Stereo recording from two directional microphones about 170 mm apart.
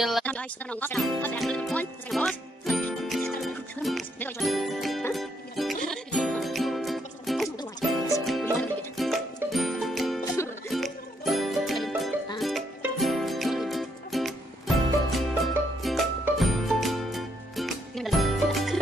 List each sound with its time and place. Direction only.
0.0 s speech: 5° left (ahead or behind)
1.2 s music: 5° left (ahead or behind)
4.4 s speech: centre (ahead or behind)
5.1 s music: centre (ahead or behind)
10.2 s music: 15° left (ahead or behind)
10.7 s music: centre (ahead or behind)